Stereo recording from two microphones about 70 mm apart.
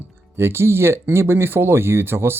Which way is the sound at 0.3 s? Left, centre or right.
Right.